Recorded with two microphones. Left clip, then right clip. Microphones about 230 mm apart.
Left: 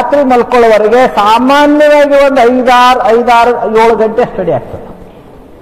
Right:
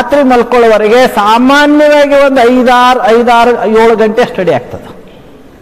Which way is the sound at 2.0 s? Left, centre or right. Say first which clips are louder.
Even; right.